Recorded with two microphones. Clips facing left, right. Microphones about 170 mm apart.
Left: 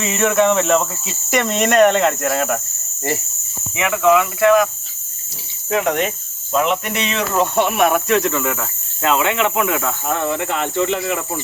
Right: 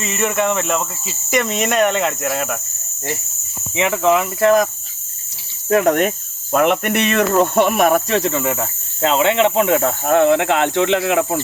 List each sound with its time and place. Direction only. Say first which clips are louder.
0.0 s speech: left 3 dB; centre (ahead or behind)
3.8 s cricket: left 1 dB; 30° right (ahead or behind)
10.1 s speech: right 8 dB; 70° right (ahead or behind)